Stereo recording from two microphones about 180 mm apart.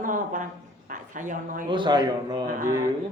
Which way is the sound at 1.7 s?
25° right (ahead or behind).